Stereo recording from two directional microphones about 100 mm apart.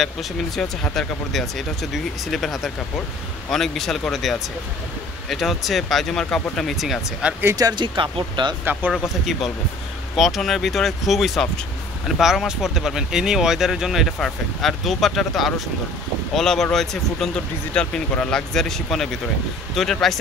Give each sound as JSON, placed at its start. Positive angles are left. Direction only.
{"t": 0.0, "sound": "speech", "side_deg": 0}
{"t": 7.5, "sound": "speech", "side_deg": -45}
{"t": 9.2, "sound": "speech", "side_deg": 0}